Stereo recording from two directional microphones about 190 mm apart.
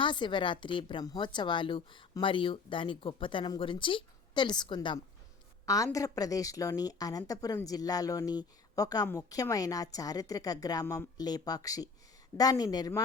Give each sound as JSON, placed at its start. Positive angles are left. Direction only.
{"t": 0.0, "sound": "a woman's voice", "side_deg": 25}